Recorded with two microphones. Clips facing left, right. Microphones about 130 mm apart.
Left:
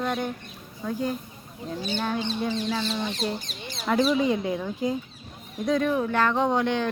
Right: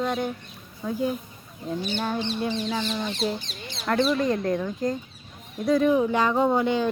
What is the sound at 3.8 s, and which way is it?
Speech, 5° left (ahead or behind).